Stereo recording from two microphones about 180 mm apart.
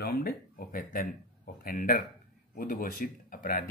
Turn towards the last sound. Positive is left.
turn(degrees=50)  # may be behind; listen again after turning